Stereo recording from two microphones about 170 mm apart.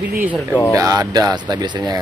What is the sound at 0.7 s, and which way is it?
Speech, 20° right (ahead or behind).